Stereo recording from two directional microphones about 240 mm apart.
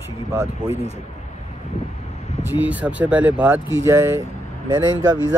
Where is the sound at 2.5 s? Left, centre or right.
Centre.